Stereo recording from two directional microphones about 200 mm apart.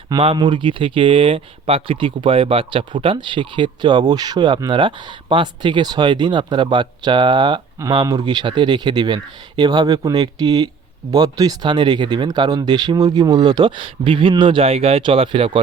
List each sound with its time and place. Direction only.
0.1 s speech: 25° right (ahead or behind)